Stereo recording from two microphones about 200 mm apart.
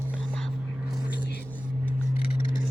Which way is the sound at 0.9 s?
5° right (ahead or behind).